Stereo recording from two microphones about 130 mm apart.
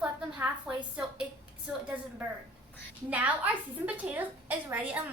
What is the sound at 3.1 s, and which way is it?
A woman's voice, 10° right (ahead or behind).